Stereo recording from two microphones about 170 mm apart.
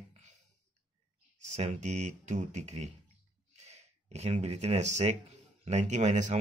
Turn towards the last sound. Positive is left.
turn(degrees=-45)  # may be behind; listen again after turning